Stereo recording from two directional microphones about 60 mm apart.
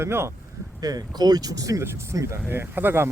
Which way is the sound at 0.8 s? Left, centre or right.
Right.